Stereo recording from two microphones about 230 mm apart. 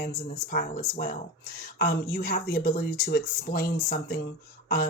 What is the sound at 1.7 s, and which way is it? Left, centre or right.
Speech, left.